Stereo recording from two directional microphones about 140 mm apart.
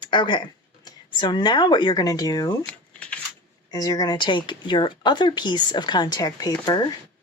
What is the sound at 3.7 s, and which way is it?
Speech, 30° left (ahead or behind).